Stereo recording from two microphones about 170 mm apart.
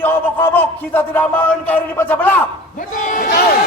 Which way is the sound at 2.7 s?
50° left (ahead or behind).